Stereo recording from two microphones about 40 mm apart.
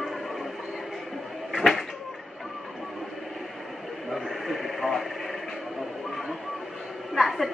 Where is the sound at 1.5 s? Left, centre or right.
Centre.